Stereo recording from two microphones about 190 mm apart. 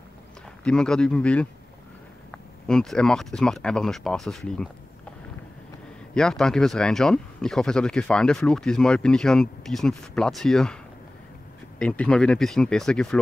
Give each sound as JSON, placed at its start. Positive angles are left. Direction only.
{"t": 0.7, "sound": "speech", "side_deg": 5}
{"t": 2.6, "sound": "speech", "side_deg": 5}
{"t": 6.1, "sound": "speech", "side_deg": 5}
{"t": 11.8, "sound": "speech", "side_deg": 5}